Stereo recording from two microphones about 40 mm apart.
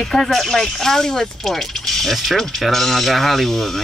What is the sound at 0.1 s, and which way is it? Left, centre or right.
Speech, centre.